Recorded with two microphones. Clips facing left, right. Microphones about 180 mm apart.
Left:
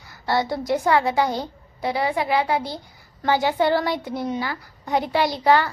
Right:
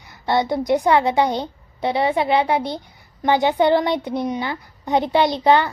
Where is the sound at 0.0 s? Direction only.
20° right (ahead or behind).